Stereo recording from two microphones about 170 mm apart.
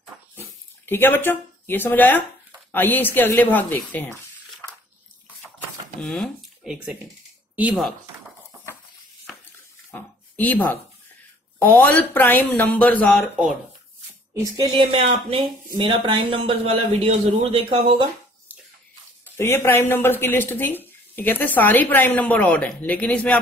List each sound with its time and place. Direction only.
0.8 s speech: 10° left (ahead or behind)
5.9 s speech: 5° left (ahead or behind)
9.8 s a sound: 10° left (ahead or behind)
11.6 s speech: 10° left (ahead or behind)
14.4 s speech: 20° right (ahead or behind)
14.9 s a man's voice: 35° right (ahead or behind)
19.3 s speech: 15° left (ahead or behind)